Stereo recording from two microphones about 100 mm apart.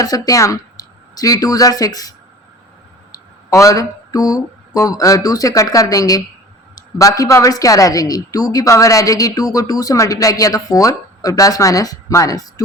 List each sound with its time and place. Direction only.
0.0 s a woman's voice: 35° left (ahead or behind)
3.5 s a woman's voice: 35° left (ahead or behind)